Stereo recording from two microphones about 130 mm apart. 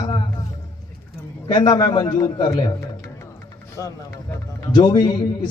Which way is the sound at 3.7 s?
25° left (ahead or behind).